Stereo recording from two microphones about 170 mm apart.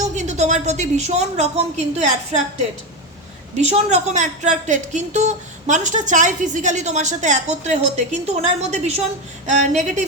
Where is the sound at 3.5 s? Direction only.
40° right (ahead or behind).